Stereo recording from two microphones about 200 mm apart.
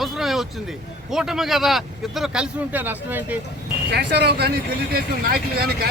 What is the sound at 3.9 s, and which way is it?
Speech, 55° right (ahead or behind).